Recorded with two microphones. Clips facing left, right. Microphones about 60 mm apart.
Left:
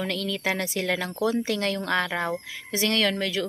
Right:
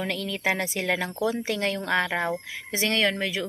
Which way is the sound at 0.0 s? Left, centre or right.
Centre.